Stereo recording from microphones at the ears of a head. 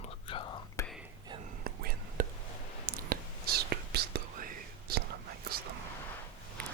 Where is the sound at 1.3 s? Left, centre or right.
Right.